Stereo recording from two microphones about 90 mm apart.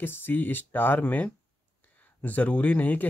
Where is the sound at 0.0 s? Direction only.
25° left (ahead or behind).